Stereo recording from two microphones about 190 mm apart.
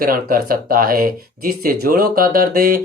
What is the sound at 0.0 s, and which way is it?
Speech, 50° right (ahead or behind).